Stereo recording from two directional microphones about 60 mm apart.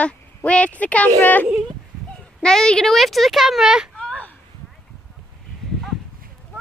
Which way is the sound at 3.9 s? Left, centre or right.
Centre.